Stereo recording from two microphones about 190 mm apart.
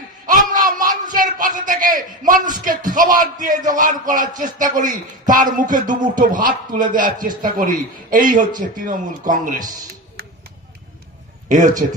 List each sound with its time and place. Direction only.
0.5 s a man's voice: 45° right (ahead or behind)
11.4 s a man's voice: 40° right (ahead or behind)